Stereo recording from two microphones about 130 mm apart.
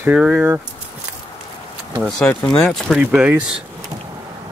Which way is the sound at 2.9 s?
10° right (ahead or behind).